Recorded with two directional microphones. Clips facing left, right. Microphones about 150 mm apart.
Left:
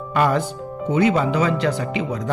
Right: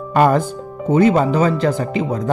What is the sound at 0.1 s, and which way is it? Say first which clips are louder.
Speech: right 5 dB; 45° right (ahead or behind).